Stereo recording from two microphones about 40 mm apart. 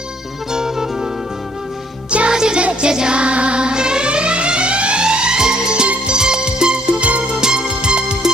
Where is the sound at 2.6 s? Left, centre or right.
Right.